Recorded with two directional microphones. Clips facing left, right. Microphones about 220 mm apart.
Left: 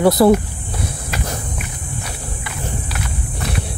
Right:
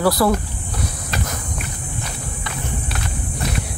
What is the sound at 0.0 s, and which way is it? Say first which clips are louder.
Speech: left 5 dB; 20° left (ahead or behind).